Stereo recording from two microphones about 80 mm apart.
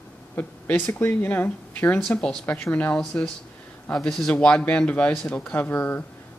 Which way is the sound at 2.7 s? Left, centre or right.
Centre.